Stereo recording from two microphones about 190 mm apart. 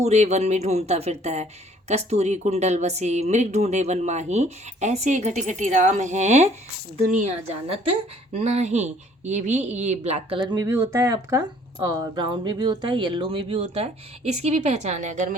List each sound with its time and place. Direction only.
0.0 s speech: 35° right (ahead or behind)